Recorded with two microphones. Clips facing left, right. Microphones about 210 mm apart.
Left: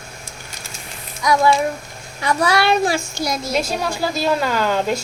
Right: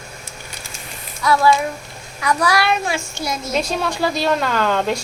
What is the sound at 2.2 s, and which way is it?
A child's voice, 25° left (ahead or behind).